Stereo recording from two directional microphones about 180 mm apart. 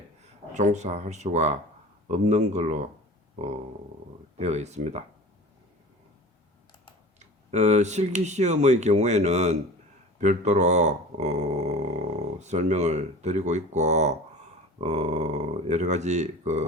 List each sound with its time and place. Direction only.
0.5 s speech: 40° right (ahead or behind)
4.4 s speech: 40° right (ahead or behind)
7.5 s speech: 40° right (ahead or behind)